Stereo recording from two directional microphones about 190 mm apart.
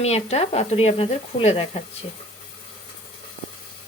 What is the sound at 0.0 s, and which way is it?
Speech, 35° left (ahead or behind).